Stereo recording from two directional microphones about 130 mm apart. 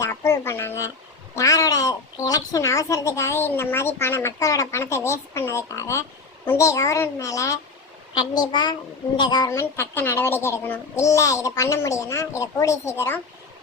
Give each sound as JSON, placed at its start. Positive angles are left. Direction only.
{"t": 0.0, "sound": "a sound", "side_deg": 20}
{"t": 1.4, "sound": "a woman's voice", "side_deg": 25}
{"t": 8.1, "sound": "a child's voice", "side_deg": 35}
{"t": 9.5, "sound": "a woman's voice", "side_deg": 20}